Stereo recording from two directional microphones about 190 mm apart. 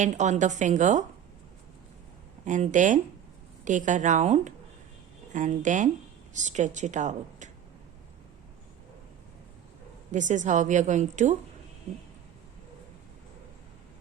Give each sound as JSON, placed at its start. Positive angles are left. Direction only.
{"t": 0.0, "sound": "a woman's voice", "side_deg": -40}
{"t": 2.4, "sound": "a woman's voice", "side_deg": -40}
{"t": 10.1, "sound": "a woman's voice", "side_deg": -40}